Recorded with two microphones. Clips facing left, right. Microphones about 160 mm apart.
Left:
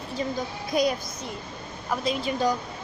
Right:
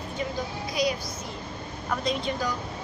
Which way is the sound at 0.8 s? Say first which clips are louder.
Left 3 dB; 50° left (ahead or behind).